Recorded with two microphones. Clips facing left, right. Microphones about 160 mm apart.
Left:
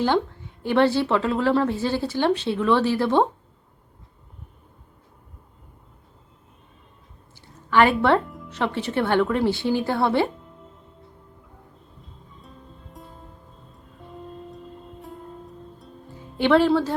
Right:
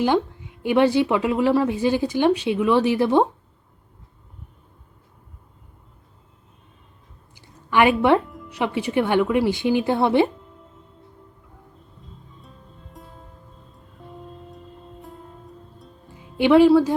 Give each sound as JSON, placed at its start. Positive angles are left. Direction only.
{"t": 0.0, "sound": "a woman's voice", "side_deg": -15}
{"t": 7.7, "sound": "a woman's voice", "side_deg": -15}
{"t": 16.4, "sound": "a woman's voice", "side_deg": -10}